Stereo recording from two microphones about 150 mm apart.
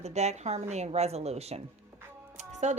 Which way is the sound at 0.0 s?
45° right (ahead or behind).